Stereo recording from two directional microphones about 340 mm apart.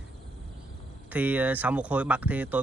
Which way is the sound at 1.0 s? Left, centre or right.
Centre.